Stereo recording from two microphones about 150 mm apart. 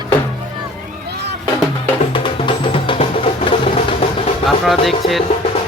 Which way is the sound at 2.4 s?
35° left (ahead or behind).